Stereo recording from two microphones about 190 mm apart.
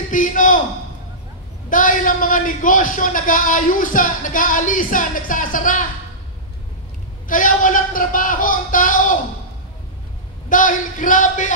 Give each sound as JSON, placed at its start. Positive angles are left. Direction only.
{"t": 0.1, "sound": "a sound", "side_deg": 45}
{"t": 1.7, "sound": "a man's voice", "side_deg": 45}
{"t": 7.2, "sound": "a man's voice", "side_deg": 45}
{"t": 10.5, "sound": "a man's voice", "side_deg": 45}